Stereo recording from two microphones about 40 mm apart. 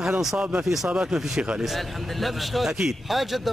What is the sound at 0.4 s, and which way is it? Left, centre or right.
A man's voice, right.